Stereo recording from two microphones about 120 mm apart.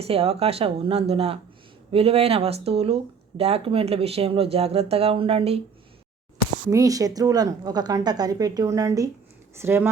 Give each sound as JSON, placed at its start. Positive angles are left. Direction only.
{"t": 0.0, "sound": "speech", "side_deg": -55}
{"t": 6.7, "sound": "a woman's voice", "side_deg": -30}